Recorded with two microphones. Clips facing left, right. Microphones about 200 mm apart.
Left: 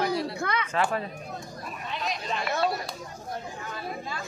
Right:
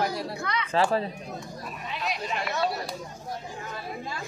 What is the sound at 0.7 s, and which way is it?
Speech, 30° right (ahead or behind).